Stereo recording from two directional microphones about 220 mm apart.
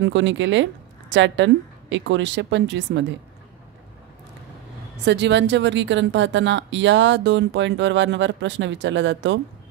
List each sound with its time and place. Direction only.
0.0 s speech: 55° right (ahead or behind)
5.0 s speech: 50° right (ahead or behind)